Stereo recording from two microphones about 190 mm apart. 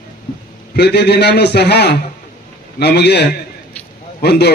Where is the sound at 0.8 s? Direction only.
60° left (ahead or behind).